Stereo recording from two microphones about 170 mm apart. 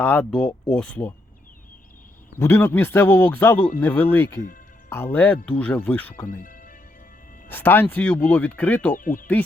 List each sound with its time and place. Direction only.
0.0 s speech: 10° left (ahead or behind)
2.4 s speech: 15° left (ahead or behind)
6.2 s music: 50° left (ahead or behind)
7.4 s speech: 10° left (ahead or behind)
9.0 s speech: 55° left (ahead or behind)